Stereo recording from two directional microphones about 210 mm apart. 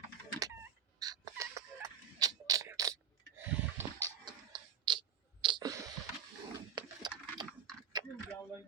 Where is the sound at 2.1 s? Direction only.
15° right (ahead or behind).